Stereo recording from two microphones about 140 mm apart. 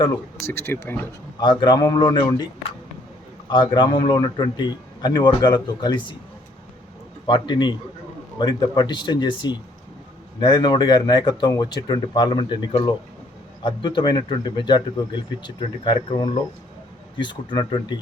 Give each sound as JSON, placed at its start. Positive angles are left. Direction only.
{"t": 0.0, "sound": "speech", "side_deg": 20}
{"t": 1.4, "sound": "speech", "side_deg": 35}
{"t": 3.5, "sound": "speech", "side_deg": 35}
{"t": 7.3, "sound": "speech", "side_deg": 35}
{"t": 13.6, "sound": "speech", "side_deg": 35}